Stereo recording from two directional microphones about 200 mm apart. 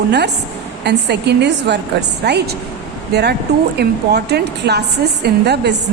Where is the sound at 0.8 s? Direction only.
55° right (ahead or behind).